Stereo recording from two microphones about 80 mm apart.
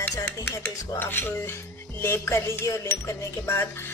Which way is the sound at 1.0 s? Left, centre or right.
Left.